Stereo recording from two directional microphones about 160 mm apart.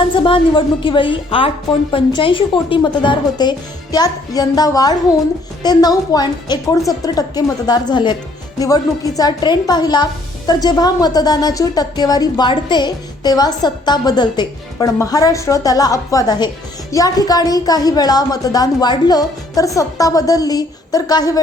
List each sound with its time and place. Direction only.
0.0 s a woman's voice: 30° left (ahead or behind)